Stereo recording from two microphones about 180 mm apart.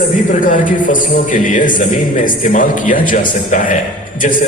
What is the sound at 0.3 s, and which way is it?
A man's voice, 45° left (ahead or behind).